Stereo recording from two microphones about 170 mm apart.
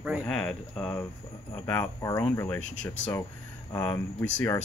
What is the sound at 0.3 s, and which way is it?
Speech, 5° left (ahead or behind).